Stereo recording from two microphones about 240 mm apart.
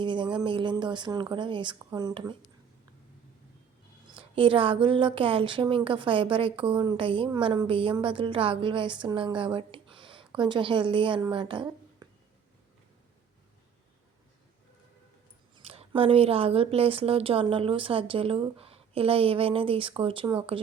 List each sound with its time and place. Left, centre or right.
0.0 s a woman's voice: centre
4.2 s a woman's voice: right
15.5 s a woman's voice: right